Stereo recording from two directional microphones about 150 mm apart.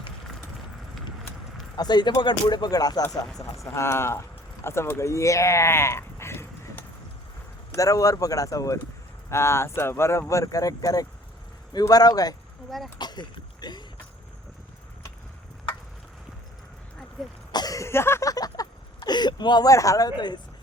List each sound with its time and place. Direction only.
1.7 s speech: 30° left (ahead or behind)
13.0 s a sound: 30° left (ahead or behind)
17.5 s cough: 25° left (ahead or behind)
18.9 s speech: 30° left (ahead or behind)